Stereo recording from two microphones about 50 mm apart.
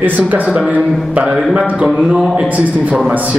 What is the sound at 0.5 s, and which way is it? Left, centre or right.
Speech, right.